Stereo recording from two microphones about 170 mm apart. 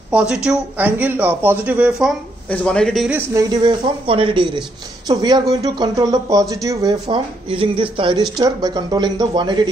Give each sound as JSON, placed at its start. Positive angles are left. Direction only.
{"t": 0.1, "sound": "a man's voice", "side_deg": -5}
{"t": 3.3, "sound": "speech", "side_deg": -25}